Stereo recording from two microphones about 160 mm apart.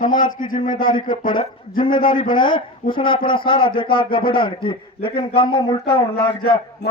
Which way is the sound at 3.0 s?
30° left (ahead or behind).